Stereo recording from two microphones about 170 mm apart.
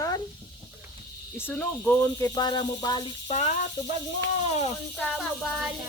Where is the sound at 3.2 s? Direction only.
45° left (ahead or behind).